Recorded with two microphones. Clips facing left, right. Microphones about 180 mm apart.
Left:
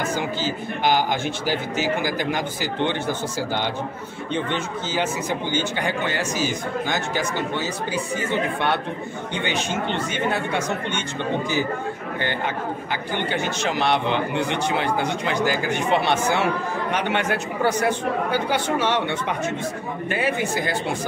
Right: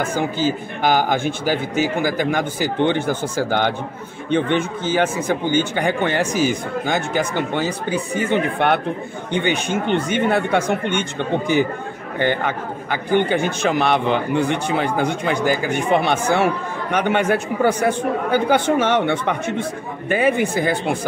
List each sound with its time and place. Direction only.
0.0 s speech: 50° right (ahead or behind)
12.9 s speech: 50° right (ahead or behind)